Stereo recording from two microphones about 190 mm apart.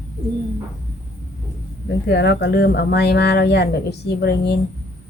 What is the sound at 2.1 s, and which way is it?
A woman's voice, 65° left (ahead or behind).